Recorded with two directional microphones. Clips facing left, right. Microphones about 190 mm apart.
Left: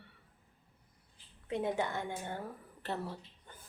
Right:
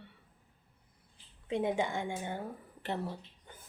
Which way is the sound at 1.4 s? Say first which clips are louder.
Right 2 dB; 15° right (ahead or behind).